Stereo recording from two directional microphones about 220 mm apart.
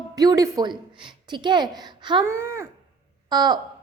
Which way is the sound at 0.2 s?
15° right (ahead or behind).